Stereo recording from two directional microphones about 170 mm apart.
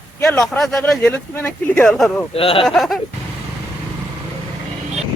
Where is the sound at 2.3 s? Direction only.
35° left (ahead or behind).